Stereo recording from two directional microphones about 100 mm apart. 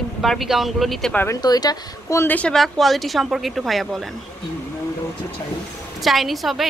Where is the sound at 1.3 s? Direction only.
40° left (ahead or behind).